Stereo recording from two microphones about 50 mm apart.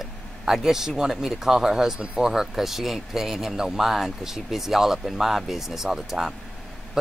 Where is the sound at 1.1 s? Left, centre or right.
Centre.